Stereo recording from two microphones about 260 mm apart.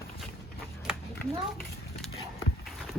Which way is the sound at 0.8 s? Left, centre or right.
Centre.